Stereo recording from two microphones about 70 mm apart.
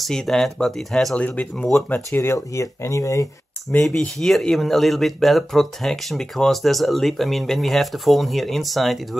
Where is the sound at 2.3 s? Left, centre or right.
Left.